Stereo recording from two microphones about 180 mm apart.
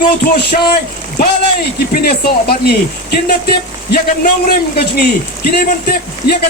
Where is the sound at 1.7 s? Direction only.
55° left (ahead or behind).